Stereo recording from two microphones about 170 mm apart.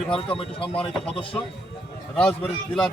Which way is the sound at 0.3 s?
30° left (ahead or behind).